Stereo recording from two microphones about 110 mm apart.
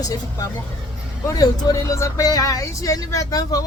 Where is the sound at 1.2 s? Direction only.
35° left (ahead or behind).